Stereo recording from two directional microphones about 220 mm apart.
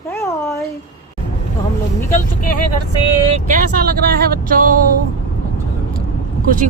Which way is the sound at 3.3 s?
35° right (ahead or behind).